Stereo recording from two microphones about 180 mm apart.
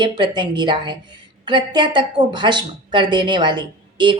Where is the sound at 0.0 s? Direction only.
25° right (ahead or behind).